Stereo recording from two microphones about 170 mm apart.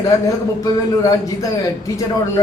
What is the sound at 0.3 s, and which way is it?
A man's voice, 20° left (ahead or behind).